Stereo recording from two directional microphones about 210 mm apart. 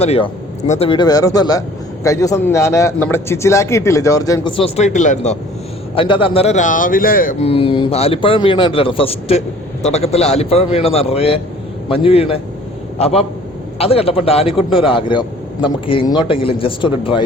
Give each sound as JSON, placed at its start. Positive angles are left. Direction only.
{"t": 0.0, "sound": "a man's voice", "side_deg": 30}